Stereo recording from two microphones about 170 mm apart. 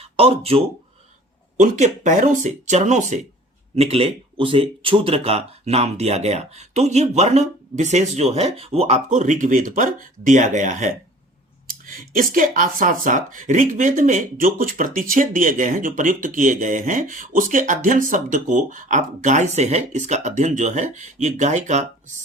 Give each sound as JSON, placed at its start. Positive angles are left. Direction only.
{"t": 0.0, "sound": "speech", "side_deg": -35}
{"t": 1.6, "sound": "speech", "side_deg": -45}